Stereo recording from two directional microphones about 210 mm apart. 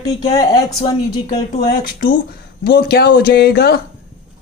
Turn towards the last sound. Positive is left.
turn(degrees=50)  # may be behind; listen again after turning